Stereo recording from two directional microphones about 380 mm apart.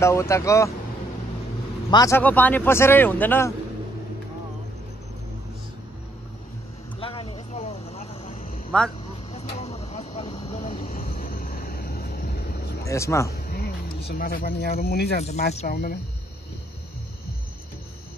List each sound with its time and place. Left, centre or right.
0.0 s speech: centre
1.9 s speech: centre
7.0 s vehicle: centre
12.8 s speech: centre
13.3 s speech: left